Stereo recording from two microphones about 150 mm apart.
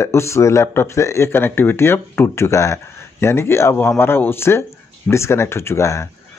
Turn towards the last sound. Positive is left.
turn(degrees=20)  # may be behind; listen again after turning